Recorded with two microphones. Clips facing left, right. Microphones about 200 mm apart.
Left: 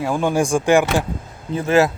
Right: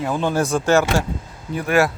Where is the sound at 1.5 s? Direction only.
25° left (ahead or behind).